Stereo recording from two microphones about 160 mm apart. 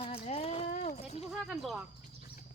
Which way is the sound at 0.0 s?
40° left (ahead or behind).